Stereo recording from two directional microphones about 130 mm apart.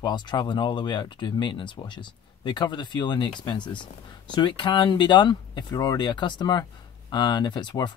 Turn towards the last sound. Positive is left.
turn(degrees=35)  # may be behind; listen again after turning